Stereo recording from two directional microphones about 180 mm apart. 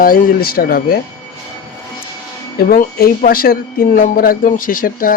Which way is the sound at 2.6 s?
55° left (ahead or behind).